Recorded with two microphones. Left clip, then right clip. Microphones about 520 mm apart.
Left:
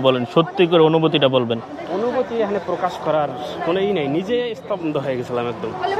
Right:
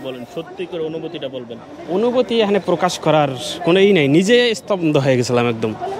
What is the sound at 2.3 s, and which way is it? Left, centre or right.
Speech, right.